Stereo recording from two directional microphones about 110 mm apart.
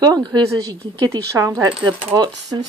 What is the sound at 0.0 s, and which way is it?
Speech, 40° right (ahead or behind).